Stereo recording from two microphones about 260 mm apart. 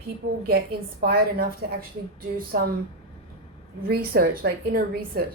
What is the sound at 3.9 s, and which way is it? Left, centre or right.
Speech, right.